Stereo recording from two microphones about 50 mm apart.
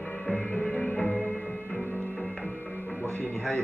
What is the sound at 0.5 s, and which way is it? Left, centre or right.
Music, left.